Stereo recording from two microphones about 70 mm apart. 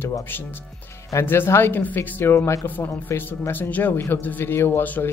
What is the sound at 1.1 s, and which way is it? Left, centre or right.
Speech, left.